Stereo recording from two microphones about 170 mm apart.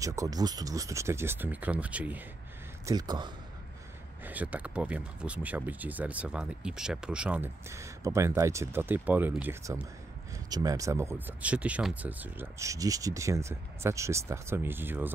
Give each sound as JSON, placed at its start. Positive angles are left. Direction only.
{"t": 0.0, "sound": "speech", "side_deg": -20}
{"t": 2.9, "sound": "speech", "side_deg": -25}
{"t": 4.2, "sound": "speech", "side_deg": -10}